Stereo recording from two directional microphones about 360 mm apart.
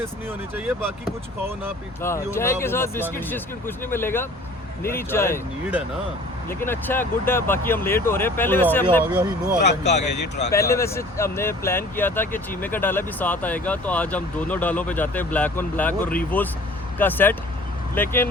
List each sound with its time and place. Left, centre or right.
0.3 s speech: centre
2.0 s speech: centre
6.5 s speech: centre
9.1 s speech: centre
9.6 s speech: centre
10.0 s speech: left
10.5 s speech: centre